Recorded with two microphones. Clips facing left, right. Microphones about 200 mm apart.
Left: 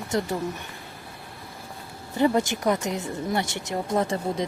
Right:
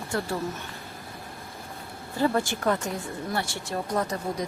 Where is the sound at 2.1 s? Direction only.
20° left (ahead or behind).